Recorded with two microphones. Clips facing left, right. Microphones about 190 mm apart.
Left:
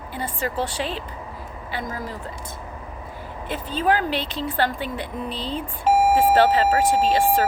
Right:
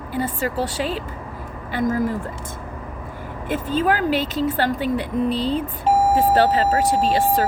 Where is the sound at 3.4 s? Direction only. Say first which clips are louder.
Right 2 dB; 45° right (ahead or behind).